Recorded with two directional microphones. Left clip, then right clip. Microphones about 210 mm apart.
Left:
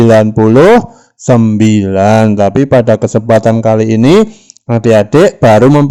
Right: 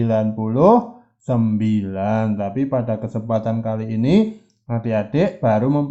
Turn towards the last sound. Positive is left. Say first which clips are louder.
# left 13 dB
turn(degrees=45)  # may be behind; listen again after turning